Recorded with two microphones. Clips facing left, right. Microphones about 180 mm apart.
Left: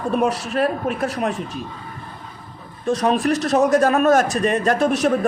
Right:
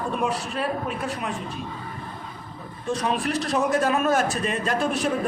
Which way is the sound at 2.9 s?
40° left (ahead or behind).